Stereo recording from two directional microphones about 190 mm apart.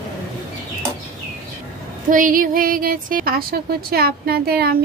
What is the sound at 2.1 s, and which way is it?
A woman's voice, 45° right (ahead or behind).